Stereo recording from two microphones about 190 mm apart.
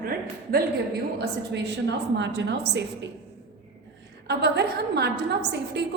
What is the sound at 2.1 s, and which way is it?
Speech, 65° right (ahead or behind).